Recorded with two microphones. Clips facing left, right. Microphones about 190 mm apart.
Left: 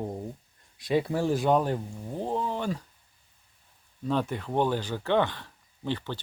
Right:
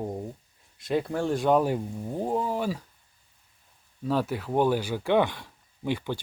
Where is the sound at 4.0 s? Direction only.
5° right (ahead or behind).